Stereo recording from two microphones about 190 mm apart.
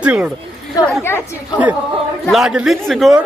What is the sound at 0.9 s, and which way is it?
Speech, 10° left (ahead or behind).